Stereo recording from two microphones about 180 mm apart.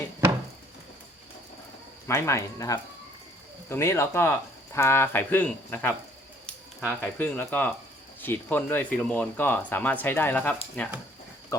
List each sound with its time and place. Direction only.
2.0 s speech: 15° left (ahead or behind)